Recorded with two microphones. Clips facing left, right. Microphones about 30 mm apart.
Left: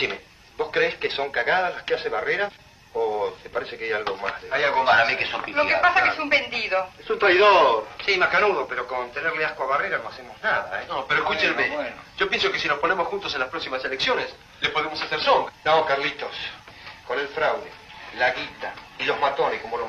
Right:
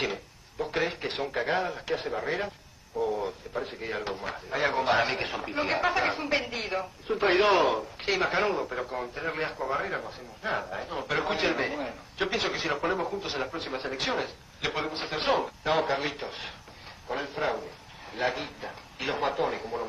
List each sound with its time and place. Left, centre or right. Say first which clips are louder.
0.0 s a man's voice: left 5 dB; left
7.5 s a man's voice: left 7 dB; left